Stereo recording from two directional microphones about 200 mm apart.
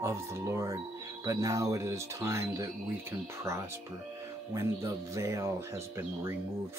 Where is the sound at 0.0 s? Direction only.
15° right (ahead or behind).